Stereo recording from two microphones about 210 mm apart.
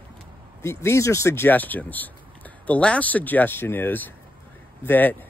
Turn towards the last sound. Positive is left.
turn(degrees=10)  # may be behind; listen again after turning